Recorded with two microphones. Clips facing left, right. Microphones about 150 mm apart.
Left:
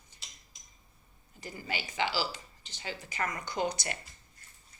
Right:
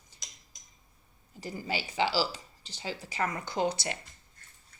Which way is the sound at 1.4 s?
35° right (ahead or behind).